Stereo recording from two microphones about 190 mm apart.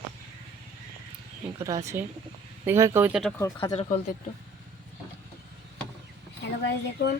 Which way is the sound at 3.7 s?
35° left (ahead or behind).